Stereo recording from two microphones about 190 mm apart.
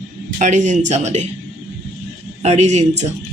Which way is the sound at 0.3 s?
40° right (ahead or behind).